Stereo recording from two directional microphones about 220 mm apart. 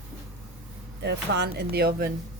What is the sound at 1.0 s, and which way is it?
Speech, 50° right (ahead or behind).